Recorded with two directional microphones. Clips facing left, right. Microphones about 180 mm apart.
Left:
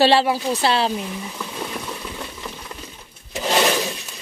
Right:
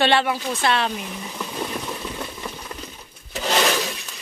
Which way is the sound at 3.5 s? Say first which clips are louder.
Left 2 dB; 15° left (ahead or behind).